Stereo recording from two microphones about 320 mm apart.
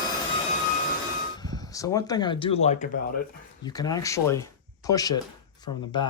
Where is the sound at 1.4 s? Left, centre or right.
Centre.